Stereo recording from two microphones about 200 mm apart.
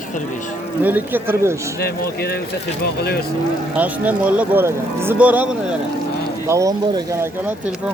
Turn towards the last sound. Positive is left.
turn(degrees=-15)  # may be behind; listen again after turning